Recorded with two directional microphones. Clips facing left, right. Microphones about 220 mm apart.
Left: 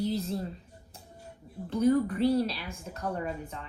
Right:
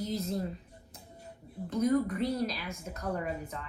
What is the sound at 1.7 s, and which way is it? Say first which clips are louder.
A woman's voice: left 3 dB; 35° left (ahead or behind).